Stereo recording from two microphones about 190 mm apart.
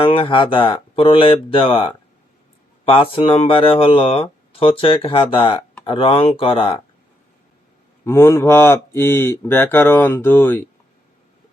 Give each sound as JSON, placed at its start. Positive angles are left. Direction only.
{"t": 0.0, "sound": "speech", "side_deg": 25}
{"t": 8.0, "sound": "speech", "side_deg": 10}